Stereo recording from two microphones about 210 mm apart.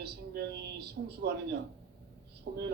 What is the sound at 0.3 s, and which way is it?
Speech, 50° right (ahead or behind).